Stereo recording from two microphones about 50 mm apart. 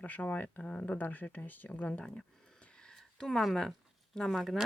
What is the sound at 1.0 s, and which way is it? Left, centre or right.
Speech, left.